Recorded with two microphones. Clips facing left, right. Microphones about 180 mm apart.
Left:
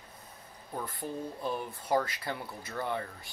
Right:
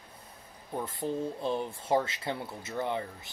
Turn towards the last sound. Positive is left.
turn(degrees=-20)  # may be behind; listen again after turning